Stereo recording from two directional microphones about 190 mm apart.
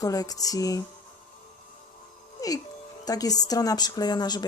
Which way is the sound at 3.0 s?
20° left (ahead or behind).